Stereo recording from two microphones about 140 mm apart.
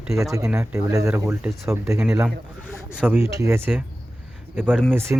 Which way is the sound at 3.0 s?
15° right (ahead or behind).